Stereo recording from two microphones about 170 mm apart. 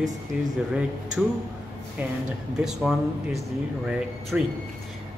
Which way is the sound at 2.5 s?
5° right (ahead or behind).